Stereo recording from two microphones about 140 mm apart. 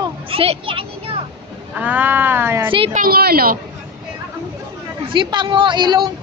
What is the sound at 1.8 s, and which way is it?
Speech, 10° right (ahead or behind).